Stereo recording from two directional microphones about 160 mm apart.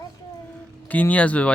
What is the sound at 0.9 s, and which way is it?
Speech, 10° left (ahead or behind).